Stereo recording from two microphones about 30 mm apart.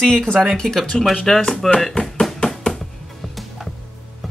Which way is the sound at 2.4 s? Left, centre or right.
Left.